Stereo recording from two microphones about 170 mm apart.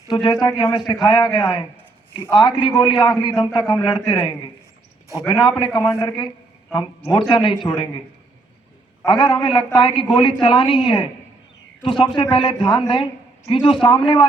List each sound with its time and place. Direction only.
0.1 s a man's voice: 25° left (ahead or behind)
9.0 s a man's voice: 30° left (ahead or behind)